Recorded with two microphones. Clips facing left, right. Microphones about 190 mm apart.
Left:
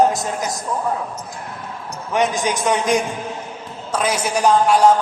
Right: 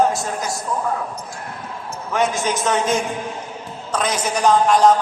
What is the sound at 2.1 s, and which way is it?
A man's voice, 15° left (ahead or behind).